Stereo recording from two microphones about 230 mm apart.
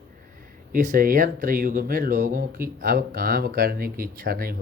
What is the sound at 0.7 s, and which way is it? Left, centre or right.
Speech, right.